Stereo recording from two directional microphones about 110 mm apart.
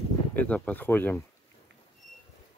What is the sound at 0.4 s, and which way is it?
Speech, 15° left (ahead or behind).